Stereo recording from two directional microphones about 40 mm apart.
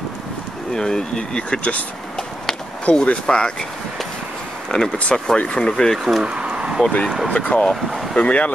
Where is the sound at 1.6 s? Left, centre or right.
Left.